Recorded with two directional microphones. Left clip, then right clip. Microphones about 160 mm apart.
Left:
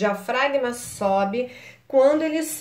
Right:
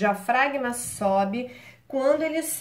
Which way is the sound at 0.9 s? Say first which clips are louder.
Left 2 dB; 15° left (ahead or behind).